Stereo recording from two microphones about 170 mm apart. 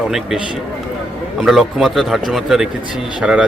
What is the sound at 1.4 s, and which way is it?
Speech, centre (ahead or behind).